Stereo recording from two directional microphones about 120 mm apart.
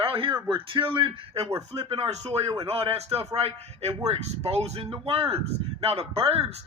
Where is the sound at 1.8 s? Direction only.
50° right (ahead or behind).